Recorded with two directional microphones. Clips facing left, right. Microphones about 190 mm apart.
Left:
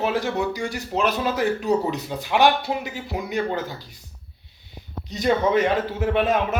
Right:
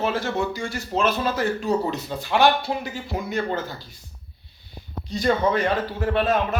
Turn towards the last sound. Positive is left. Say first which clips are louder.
# left 1 dB
turn(degrees=20)  # may be behind; listen again after turning